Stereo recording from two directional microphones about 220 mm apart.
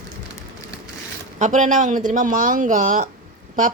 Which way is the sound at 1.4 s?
35° right (ahead or behind).